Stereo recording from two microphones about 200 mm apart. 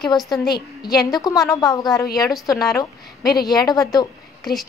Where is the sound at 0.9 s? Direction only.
20° left (ahead or behind).